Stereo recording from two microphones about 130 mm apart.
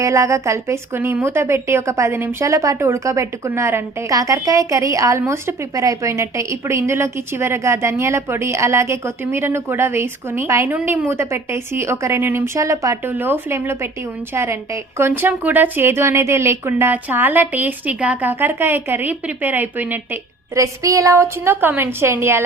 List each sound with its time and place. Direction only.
0.0 s a woman's voice: 25° right (ahead or behind)
20.6 s a woman's voice: 25° right (ahead or behind)